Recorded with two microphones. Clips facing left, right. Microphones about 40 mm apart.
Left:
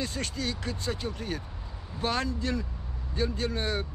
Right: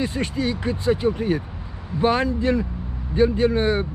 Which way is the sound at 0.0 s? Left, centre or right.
Right.